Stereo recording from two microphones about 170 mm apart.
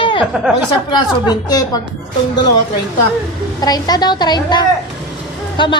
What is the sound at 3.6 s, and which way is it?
A woman's voice, 25° left (ahead or behind).